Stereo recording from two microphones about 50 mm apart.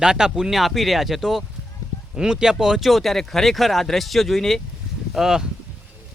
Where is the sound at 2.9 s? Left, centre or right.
Centre.